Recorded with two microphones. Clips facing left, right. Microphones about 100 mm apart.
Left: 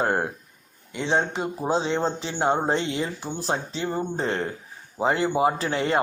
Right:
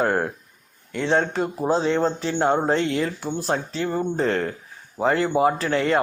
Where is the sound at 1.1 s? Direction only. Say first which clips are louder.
Right 3 dB; 15° left (ahead or behind).